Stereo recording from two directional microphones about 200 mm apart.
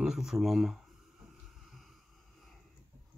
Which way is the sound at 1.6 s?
Centre (ahead or behind).